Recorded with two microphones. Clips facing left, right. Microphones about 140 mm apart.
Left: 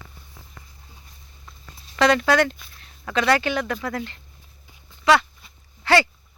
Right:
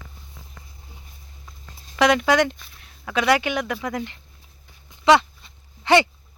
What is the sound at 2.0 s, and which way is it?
Speech, 15° right (ahead or behind).